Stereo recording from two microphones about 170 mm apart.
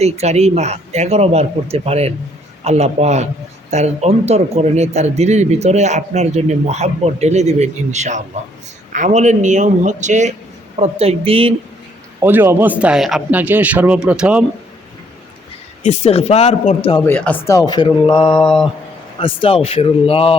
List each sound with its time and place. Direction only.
0.0 s a man's voice: 40° right (ahead or behind)
12.2 s a man's voice: 10° right (ahead or behind)
15.8 s a man's voice: 40° left (ahead or behind)
17.1 s speech: 10° left (ahead or behind); by 18.3 s 25° left (ahead or behind)
18.3 s mantra: centre (ahead or behind)
19.2 s a man's voice: 30° left (ahead or behind)